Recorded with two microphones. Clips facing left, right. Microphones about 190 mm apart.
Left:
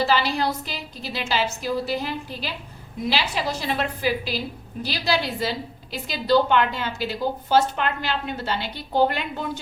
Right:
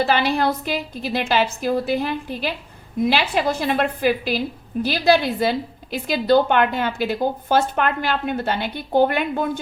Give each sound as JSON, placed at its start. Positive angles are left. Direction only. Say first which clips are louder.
{"t": 0.0, "sound": "a woman's voice", "louder": "right 3 dB", "side_deg": -55}